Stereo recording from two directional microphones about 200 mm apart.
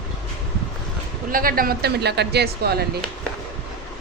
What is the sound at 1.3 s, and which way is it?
Speech, 45° right (ahead or behind).